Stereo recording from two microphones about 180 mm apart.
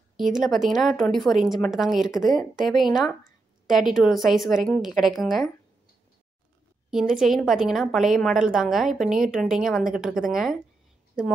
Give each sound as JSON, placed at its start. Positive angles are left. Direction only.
{"t": 0.2, "sound": "a woman's voice", "side_deg": 0}
{"t": 6.9, "sound": "a woman's voice", "side_deg": 0}